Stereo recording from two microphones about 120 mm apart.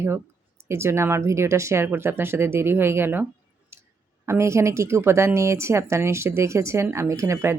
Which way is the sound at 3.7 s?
20° right (ahead or behind).